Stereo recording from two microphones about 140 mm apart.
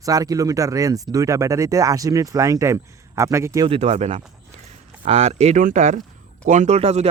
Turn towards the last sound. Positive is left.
turn(degrees=-50)  # may be behind; listen again after turning